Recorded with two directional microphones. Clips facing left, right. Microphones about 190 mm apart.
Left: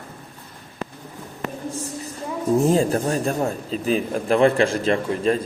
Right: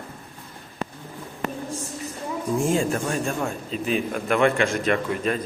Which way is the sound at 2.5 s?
35° left (ahead or behind).